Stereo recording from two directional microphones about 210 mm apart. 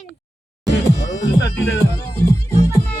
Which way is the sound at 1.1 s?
60° left (ahead or behind).